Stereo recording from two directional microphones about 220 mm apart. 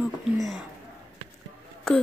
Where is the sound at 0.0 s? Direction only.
Centre (ahead or behind).